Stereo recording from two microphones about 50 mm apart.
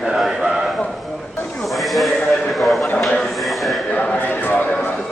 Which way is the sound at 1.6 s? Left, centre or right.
Centre.